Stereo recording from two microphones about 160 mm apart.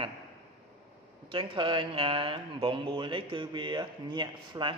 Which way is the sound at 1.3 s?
30° right (ahead or behind).